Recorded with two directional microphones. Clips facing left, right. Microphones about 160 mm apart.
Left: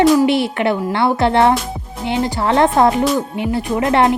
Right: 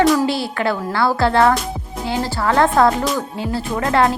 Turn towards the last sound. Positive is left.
turn(degrees=20)  # may be behind; listen again after turning